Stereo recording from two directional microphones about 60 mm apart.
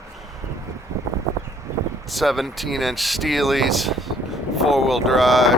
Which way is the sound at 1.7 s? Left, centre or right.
Right.